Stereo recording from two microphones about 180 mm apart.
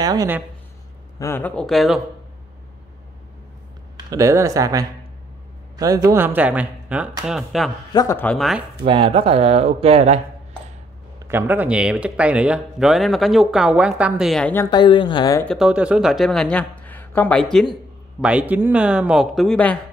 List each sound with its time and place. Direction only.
0.0 s speech: 20° right (ahead or behind)
1.2 s speech: 10° left (ahead or behind)
4.1 s speech: 20° right (ahead or behind); by 7.7 s centre (ahead or behind)
7.9 s speech: 20° left (ahead or behind)
8.2 s speech: 5° left (ahead or behind)
8.8 s speech: 30° right (ahead or behind)
11.2 s speech: 10° right (ahead or behind)
14.7 s speech: 25° left (ahead or behind)
15.4 s speech: centre (ahead or behind)
18.2 s speech: 10° right (ahead or behind)